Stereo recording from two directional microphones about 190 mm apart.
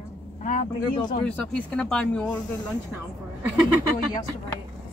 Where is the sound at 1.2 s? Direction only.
5° left (ahead or behind).